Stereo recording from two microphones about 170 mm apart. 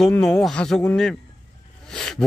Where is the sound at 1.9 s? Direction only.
5° left (ahead or behind).